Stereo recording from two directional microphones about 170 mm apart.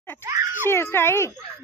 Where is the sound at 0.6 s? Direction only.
15° left (ahead or behind).